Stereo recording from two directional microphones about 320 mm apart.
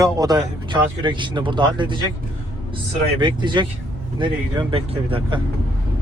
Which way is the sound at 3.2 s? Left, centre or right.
Centre.